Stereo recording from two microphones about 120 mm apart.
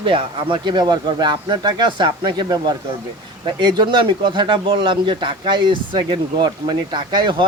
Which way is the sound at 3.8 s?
40° right (ahead or behind).